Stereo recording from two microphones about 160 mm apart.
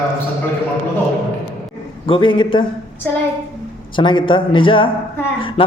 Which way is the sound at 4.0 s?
30° left (ahead or behind).